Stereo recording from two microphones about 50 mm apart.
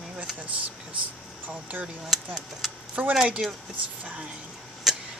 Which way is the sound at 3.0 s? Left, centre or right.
Right.